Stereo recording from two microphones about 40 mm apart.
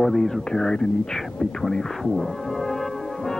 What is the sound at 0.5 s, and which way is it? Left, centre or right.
Speech, centre.